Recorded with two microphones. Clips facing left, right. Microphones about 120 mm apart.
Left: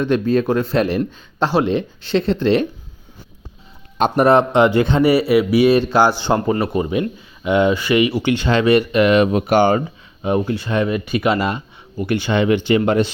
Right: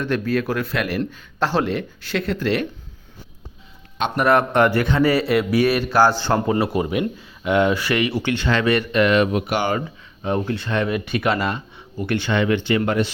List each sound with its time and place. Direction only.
0.0 s speech: 20° left (ahead or behind)
4.2 s speech: 25° left (ahead or behind)
5.0 s speech: 5° left (ahead or behind)
5.6 s speech: 20° left (ahead or behind)
6.5 s speech: centre (ahead or behind); by 9.3 s 15° left (ahead or behind)
9.3 s speech: 35° left (ahead or behind)
10.2 s speech: 10° left (ahead or behind)
12.3 s speech: 20° left (ahead or behind)